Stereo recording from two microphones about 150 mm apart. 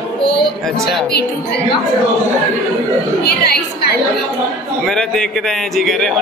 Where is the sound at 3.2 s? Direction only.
90° left.